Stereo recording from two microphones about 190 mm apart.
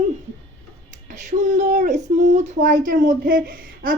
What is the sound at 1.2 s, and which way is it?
A child's voice, 40° right (ahead or behind).